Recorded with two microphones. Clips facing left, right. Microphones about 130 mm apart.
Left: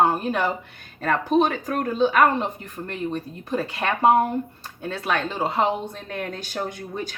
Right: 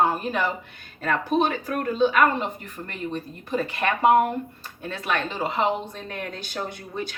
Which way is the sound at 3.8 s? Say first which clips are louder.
Even; 30° left (ahead or behind).